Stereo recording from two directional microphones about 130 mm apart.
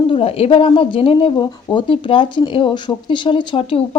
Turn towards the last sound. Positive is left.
turn(degrees=45)  # may be behind; listen again after turning